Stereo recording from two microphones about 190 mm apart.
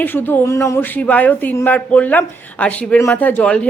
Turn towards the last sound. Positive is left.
turn(degrees=5)  # may be behind; listen again after turning